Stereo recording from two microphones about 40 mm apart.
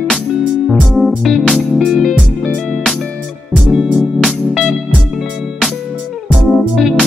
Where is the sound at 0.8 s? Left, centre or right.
Centre.